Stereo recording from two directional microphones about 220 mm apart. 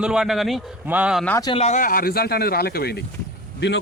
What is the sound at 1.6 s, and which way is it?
Speech, 35° left (ahead or behind).